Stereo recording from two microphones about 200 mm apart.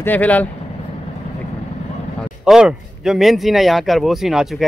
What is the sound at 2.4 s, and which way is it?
Speech, centre (ahead or behind).